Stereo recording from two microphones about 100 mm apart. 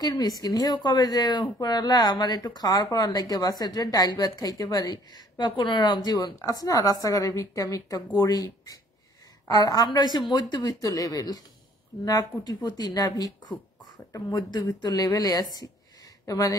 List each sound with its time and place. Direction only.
0.0 s a woman's voice: 40° left (ahead or behind)
5.1 s a woman's voice: 50° left (ahead or behind)
9.5 s a woman's voice: 40° left (ahead or behind)